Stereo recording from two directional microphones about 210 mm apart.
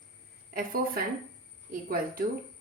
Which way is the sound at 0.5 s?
45° right (ahead or behind).